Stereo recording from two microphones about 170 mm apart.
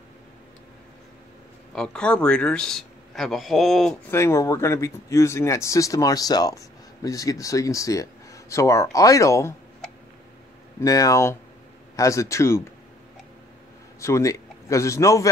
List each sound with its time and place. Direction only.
1.8 s speech: 5° left (ahead or behind)
4.1 s speech: 15° left (ahead or behind)
10.8 s speech: 20° left (ahead or behind)
13.9 s a man's voice: 15° left (ahead or behind)